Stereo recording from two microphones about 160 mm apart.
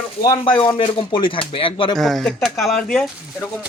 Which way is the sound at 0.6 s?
35° left (ahead or behind).